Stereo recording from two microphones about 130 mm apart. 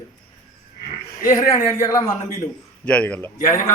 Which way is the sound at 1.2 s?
30° left (ahead or behind).